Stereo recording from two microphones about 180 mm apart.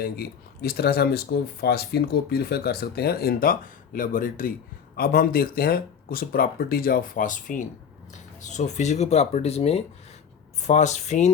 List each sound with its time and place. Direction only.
0.0 s speech: 55° left (ahead or behind); by 11.3 s 40° left (ahead or behind)